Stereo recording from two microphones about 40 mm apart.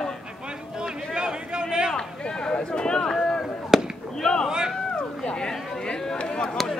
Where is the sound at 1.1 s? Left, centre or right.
Right.